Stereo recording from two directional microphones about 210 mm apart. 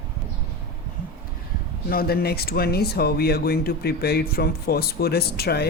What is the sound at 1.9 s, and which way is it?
Speech, 45° left (ahead or behind).